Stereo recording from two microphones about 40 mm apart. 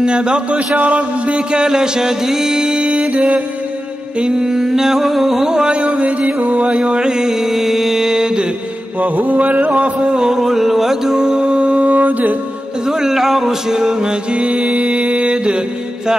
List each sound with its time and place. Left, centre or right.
0.0 s music: right
4.2 s mantra: centre
5.8 s mantra: right
7.3 s mantra: centre
9.0 s music: right
10.0 s mantra: centre
11.1 s music: right
12.8 s mantra: centre
14.3 s music: right